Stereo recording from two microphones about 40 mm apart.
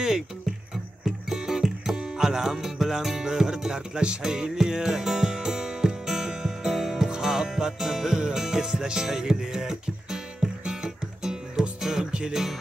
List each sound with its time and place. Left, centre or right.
1.0 s music: centre